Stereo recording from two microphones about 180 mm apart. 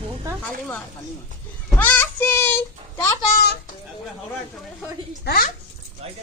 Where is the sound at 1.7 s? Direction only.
10° left (ahead or behind).